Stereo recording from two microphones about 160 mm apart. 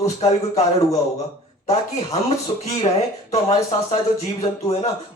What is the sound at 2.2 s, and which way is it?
Speech, 40° left (ahead or behind).